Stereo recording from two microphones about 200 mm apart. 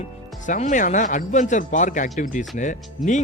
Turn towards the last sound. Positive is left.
turn(degrees=40)  # may be behind; listen again after turning